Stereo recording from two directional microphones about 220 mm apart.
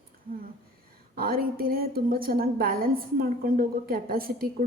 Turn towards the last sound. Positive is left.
turn(degrees=-40)  # may be behind; listen again after turning